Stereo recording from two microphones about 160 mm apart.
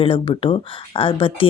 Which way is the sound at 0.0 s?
35° left (ahead or behind).